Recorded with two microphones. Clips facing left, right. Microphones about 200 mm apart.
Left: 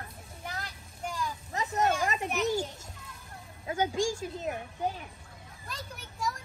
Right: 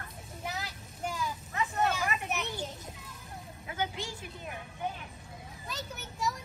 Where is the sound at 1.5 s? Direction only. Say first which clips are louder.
Left 3 dB; 40° left (ahead or behind).